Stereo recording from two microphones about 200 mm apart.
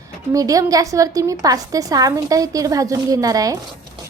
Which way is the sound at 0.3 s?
15° right (ahead or behind).